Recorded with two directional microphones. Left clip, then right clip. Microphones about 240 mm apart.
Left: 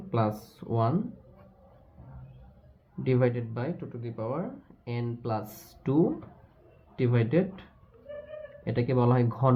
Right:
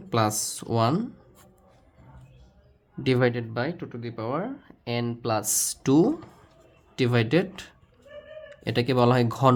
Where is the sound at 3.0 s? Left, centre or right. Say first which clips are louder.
Right 3 dB; right.